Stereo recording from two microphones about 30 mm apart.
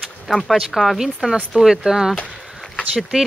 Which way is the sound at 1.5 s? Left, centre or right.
Right.